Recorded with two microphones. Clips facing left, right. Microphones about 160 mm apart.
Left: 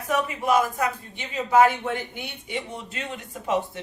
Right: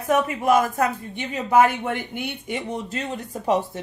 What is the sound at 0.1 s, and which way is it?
A woman's voice, 50° right (ahead or behind).